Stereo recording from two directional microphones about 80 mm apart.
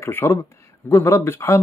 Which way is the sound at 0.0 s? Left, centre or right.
Left.